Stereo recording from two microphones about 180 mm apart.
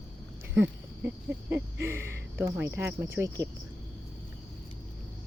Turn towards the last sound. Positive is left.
turn(degrees=-15)  # may be behind; listen again after turning